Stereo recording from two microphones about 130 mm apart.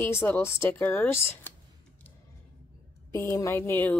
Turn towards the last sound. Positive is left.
turn(degrees=15)  # may be behind; listen again after turning